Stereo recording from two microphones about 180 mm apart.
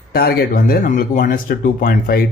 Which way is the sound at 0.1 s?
60° left (ahead or behind).